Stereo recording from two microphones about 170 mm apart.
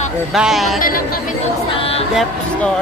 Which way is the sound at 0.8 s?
55° left (ahead or behind).